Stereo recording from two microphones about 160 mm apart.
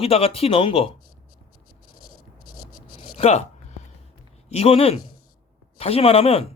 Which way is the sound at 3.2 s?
40° left (ahead or behind).